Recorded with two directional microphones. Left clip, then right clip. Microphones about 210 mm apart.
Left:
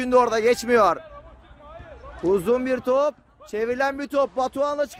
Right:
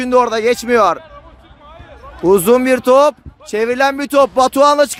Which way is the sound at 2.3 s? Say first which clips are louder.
Right 10 dB; 30° right (ahead or behind).